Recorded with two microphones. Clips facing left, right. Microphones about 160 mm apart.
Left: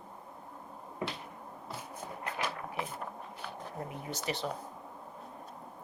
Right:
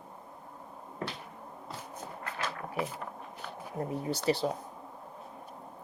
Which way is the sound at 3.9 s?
35° right (ahead or behind).